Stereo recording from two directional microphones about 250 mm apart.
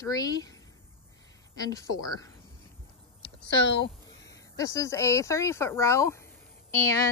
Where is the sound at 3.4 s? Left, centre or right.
Left.